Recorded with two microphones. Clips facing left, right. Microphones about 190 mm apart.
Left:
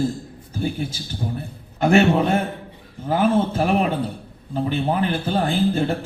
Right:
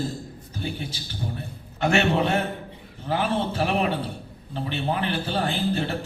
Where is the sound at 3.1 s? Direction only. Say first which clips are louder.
Left 6 dB; 45° left (ahead or behind).